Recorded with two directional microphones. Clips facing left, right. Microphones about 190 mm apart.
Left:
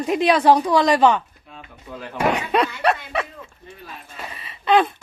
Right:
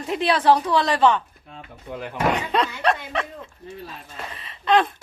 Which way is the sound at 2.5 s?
10° left (ahead or behind).